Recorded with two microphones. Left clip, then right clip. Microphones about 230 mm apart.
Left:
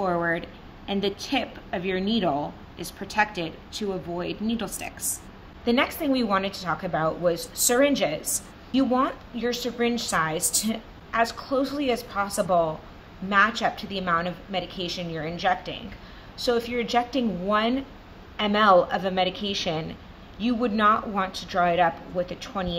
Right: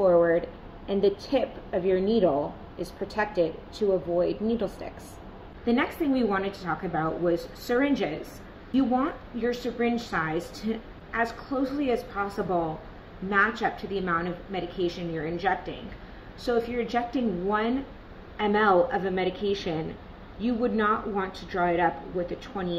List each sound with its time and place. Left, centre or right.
0.0 s a woman's voice: left
5.7 s a woman's voice: left
13.3 s a woman's voice: left